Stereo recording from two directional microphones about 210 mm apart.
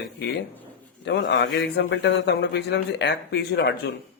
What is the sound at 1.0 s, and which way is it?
Speech, 55° left (ahead or behind).